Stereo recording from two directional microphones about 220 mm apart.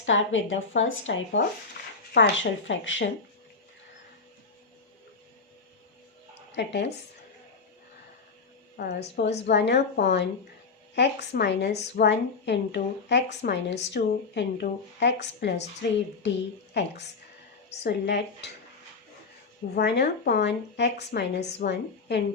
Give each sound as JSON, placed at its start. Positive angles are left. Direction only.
{"t": 0.0, "sound": "a woman's voice", "side_deg": 60}
{"t": 6.5, "sound": "speech", "side_deg": 50}
{"t": 8.7, "sound": "a woman's voice", "side_deg": 45}
{"t": 19.7, "sound": "a woman's voice", "side_deg": 45}